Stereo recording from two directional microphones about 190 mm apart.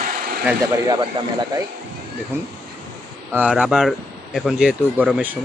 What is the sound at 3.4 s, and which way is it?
Speech, 5° right (ahead or behind).